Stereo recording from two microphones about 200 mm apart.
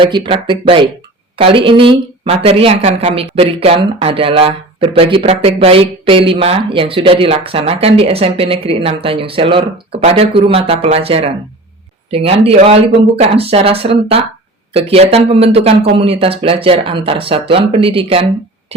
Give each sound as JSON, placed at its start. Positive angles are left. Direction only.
{"t": 0.0, "sound": "speech", "side_deg": -25}